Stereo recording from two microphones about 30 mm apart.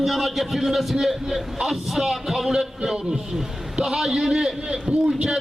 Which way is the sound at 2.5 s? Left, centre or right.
Centre.